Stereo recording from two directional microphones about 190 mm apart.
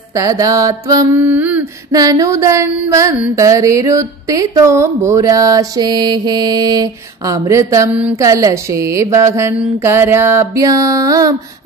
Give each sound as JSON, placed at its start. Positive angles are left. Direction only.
{"t": 0.1, "sound": "mantra", "side_deg": -15}